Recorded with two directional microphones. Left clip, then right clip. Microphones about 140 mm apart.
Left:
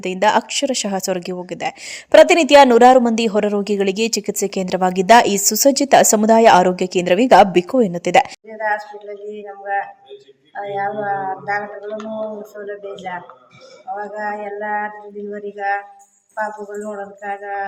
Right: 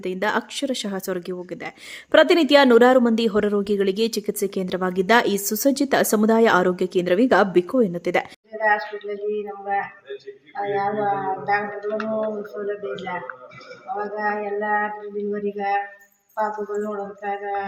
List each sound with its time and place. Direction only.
0.0 s speech: 15° left (ahead or behind)
16.8 s speech: 5° left (ahead or behind)